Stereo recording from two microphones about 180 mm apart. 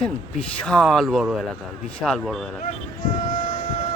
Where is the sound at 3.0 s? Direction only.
45° left (ahead or behind).